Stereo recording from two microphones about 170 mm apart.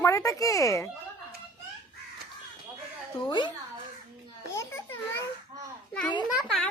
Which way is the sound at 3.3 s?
30° left (ahead or behind).